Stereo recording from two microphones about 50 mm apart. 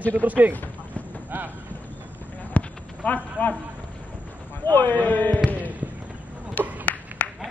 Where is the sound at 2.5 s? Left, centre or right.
Left.